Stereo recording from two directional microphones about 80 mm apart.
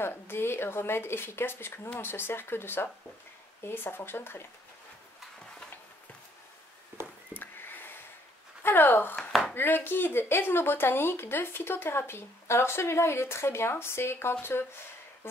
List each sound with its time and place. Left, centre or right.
0.0 s speech: left
7.3 s a sound: left
8.6 s speech: left